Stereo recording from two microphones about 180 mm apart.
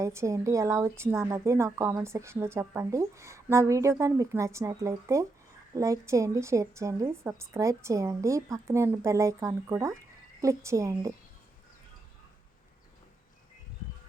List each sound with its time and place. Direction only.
0.0 s a woman's voice: 15° right (ahead or behind)